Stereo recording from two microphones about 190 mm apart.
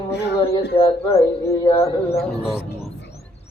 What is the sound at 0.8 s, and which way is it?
Mantra, 30° left (ahead or behind).